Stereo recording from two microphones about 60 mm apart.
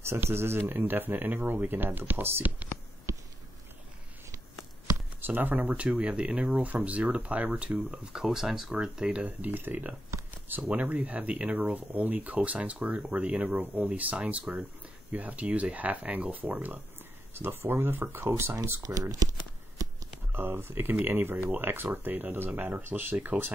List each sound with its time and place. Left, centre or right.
0.0 s speech: right
3.1 s a sound: right
5.2 s speech: right; by 9.1 s centre
9.1 s speech: right
17.3 s speech: right
18.9 s speech: right
19.8 s a sound: right
20.3 s speech: right